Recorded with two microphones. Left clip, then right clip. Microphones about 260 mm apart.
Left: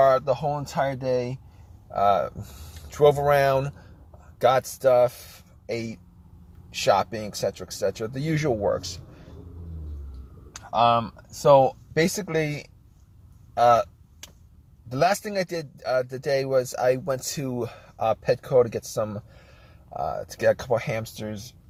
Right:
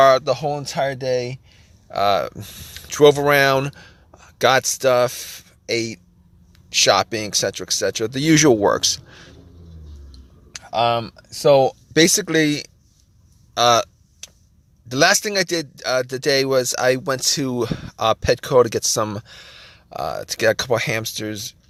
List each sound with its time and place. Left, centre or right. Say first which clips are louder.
0.0 s speech: right 5 dB; right
10.6 s speech: right 1 dB; right
14.8 s speech: right 6 dB; right